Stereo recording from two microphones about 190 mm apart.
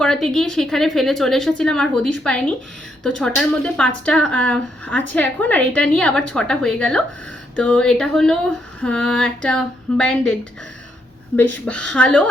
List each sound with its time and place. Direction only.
0.0 s speech: 5° left (ahead or behind)
11.6 s a woman's voice: 5° left (ahead or behind)